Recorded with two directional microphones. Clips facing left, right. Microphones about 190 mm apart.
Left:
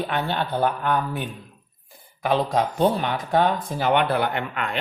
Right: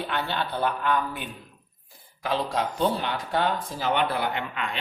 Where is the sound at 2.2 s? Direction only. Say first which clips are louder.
Left 5 dB; 55° left (ahead or behind).